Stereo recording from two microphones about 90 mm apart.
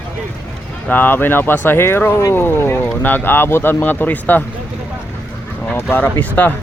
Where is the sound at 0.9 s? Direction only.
20° left (ahead or behind).